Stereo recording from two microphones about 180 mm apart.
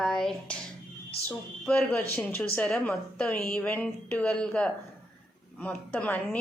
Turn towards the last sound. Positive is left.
turn(degrees=10)  # may be behind; listen again after turning